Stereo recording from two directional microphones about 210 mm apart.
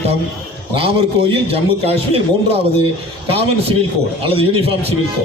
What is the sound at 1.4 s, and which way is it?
Speech, 30° right (ahead or behind).